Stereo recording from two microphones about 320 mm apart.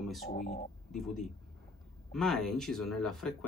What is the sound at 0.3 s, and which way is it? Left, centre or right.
Speech, left.